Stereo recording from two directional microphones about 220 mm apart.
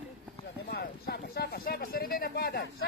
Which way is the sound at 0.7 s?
45° left (ahead or behind).